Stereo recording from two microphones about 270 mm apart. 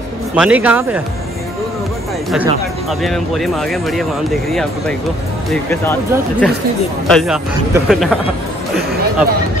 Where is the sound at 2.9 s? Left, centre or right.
Centre.